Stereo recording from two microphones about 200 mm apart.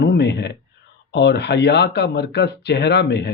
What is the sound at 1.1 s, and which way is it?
Speech, 60° left (ahead or behind).